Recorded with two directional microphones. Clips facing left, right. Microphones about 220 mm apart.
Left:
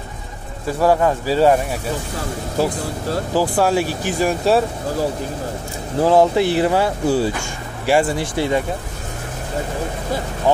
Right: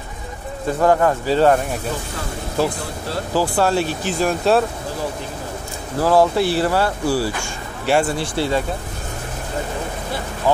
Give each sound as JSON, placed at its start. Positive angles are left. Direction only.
{"t": 0.7, "sound": "speech", "side_deg": 10}
{"t": 3.3, "sound": "speech", "side_deg": 10}
{"t": 5.9, "sound": "speech", "side_deg": 20}